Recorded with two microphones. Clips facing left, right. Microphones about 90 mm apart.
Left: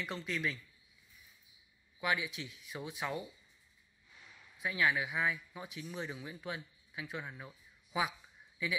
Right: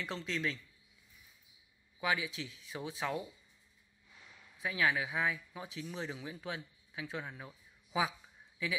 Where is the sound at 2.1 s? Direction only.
30° right (ahead or behind).